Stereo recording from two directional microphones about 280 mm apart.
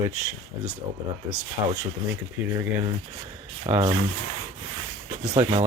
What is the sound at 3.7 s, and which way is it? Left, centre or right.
Speech, centre.